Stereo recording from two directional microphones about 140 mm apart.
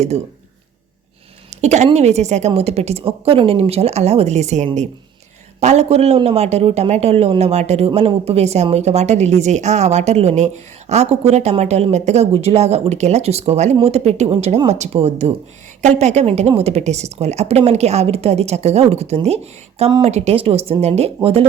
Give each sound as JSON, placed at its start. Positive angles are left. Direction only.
{"t": 1.5, "sound": "a man's voice", "side_deg": -55}